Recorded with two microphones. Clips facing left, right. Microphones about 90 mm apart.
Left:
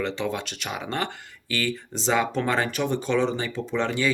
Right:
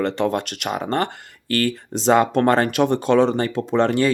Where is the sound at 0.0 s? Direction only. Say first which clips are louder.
Right 7 dB; 55° right (ahead or behind).